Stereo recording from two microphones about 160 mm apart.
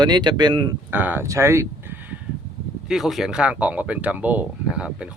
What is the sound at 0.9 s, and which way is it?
Speech, 10° right (ahead or behind).